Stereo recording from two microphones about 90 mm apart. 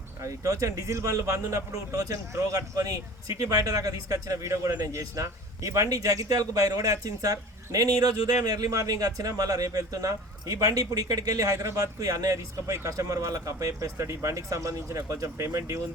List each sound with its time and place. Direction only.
0.2 s speech: 35° right (ahead or behind)